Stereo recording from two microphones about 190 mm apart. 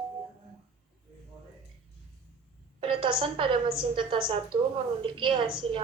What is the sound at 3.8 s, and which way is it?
A woman's voice, 25° right (ahead or behind).